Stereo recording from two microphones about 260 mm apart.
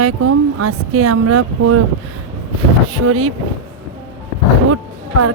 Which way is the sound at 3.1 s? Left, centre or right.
Right.